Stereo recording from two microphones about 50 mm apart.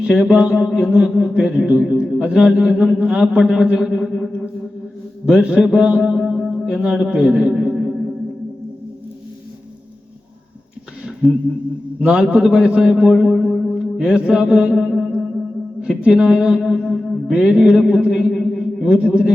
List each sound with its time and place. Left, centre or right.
0.0 s a man's voice: centre
5.2 s a man's voice: centre
6.2 s music: centre
6.7 s a man's voice: centre
7.2 s a sound: centre
11.0 s a sound: centre
11.9 s a man's voice: right
14.8 s music: centre
15.8 s a man's voice: centre
16.6 s a man's voice: centre
18.9 s a man's voice: right